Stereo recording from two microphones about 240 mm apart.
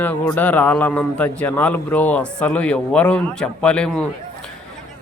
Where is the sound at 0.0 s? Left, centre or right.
Centre.